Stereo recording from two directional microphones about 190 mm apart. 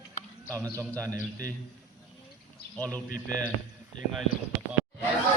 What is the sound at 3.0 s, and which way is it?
Speech, 45° left (ahead or behind).